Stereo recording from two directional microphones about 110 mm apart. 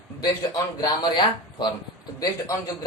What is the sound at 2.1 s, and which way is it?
Speech, 30° left (ahead or behind).